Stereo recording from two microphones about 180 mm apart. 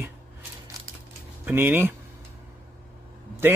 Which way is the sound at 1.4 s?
10° right (ahead or behind).